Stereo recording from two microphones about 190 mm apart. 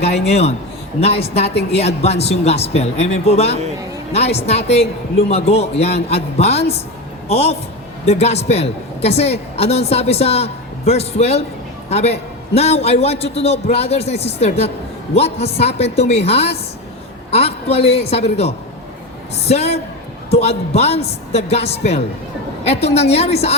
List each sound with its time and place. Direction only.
0.0 s a woman's voice: 35° left (ahead or behind)